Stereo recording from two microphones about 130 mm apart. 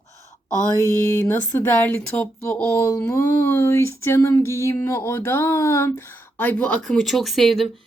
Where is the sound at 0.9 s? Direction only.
20° left (ahead or behind).